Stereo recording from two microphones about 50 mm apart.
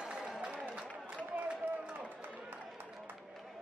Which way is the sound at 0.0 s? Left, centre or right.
Centre.